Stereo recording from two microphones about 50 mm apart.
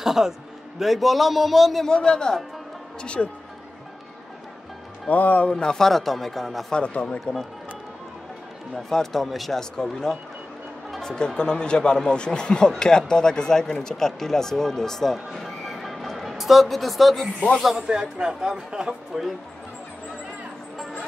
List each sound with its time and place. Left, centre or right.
0.0 s a man's voice: centre
1.9 s a man's voice: centre
5.1 s a man's voice: left
5.5 s speech: centre
6.7 s a man's voice: left
8.7 s speech: centre
15.3 s music: centre
17.2 s speech: centre
17.7 s a man's voice: centre